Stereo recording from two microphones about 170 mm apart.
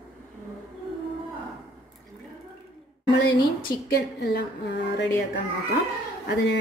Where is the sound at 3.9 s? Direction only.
75° left (ahead or behind).